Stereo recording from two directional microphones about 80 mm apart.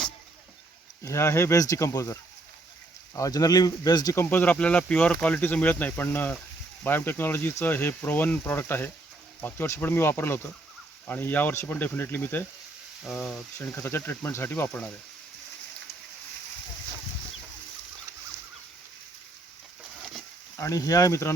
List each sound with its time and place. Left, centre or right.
1.0 s speech: left
3.2 s speech: left
4.1 s speech: left
13.1 s speech: centre
13.6 s speech: left
20.6 s speech: left